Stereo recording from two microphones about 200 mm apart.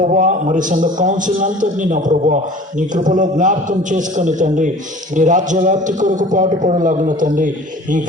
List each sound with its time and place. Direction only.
0.0 s a man's voice: 40° right (ahead or behind)